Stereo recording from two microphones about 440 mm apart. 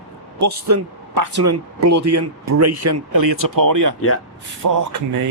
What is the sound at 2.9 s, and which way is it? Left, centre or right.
Speech, right.